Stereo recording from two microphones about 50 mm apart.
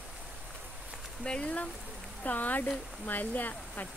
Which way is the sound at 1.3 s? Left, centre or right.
Left.